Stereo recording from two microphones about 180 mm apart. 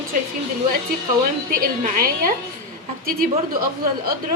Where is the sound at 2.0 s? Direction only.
55° right (ahead or behind).